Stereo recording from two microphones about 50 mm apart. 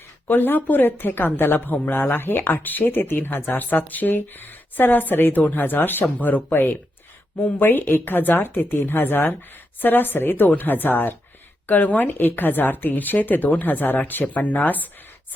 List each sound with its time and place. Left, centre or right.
0.3 s a woman's voice: left
1.5 s a woman's voice: left